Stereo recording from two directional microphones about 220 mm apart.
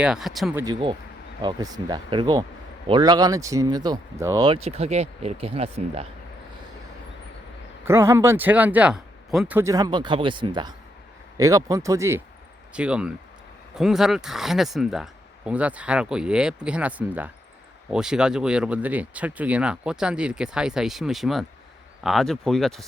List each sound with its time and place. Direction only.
0.0 s speech: centre (ahead or behind)
0.6 s speech: 20° right (ahead or behind)
7.9 s speech: 10° right (ahead or behind)